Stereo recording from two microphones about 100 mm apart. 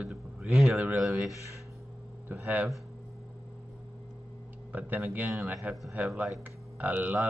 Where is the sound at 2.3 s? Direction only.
15° right (ahead or behind).